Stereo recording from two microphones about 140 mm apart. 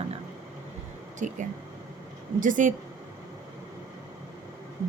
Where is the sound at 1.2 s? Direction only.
65° right (ahead or behind).